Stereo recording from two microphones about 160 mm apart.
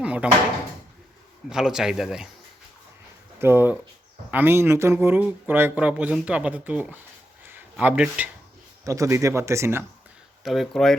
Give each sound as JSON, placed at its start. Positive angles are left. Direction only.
{"t": 0.0, "sound": "drawer open or close", "side_deg": -10}
{"t": 1.5, "sound": "speech", "side_deg": -5}
{"t": 3.3, "sound": "speech", "side_deg": -15}
{"t": 7.4, "sound": "a sound", "side_deg": -10}
{"t": 8.8, "sound": "speech", "side_deg": -20}
{"t": 10.4, "sound": "speech", "side_deg": 0}